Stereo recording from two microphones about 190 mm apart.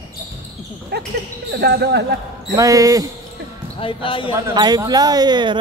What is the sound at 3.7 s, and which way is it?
Speech, 25° left (ahead or behind).